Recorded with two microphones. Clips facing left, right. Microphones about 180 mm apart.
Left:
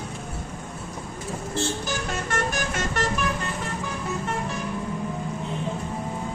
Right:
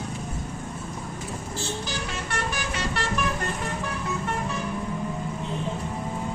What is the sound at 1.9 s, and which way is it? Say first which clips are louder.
Vehicle: left 3 dB; 45° left (ahead or behind).